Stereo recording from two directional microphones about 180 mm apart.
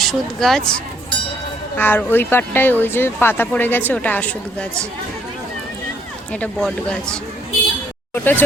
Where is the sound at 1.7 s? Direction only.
10° left (ahead or behind).